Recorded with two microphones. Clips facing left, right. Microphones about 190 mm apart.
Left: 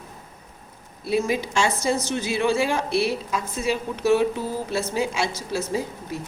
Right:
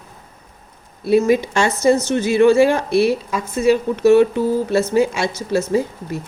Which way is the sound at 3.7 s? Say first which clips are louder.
Right 8 dB; 60° right (ahead or behind).